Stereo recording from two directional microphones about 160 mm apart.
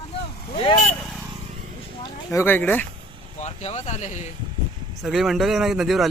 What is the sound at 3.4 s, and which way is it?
Speech, 45° left (ahead or behind).